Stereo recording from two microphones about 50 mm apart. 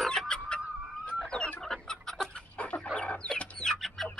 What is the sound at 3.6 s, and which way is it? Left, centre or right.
Bird, centre.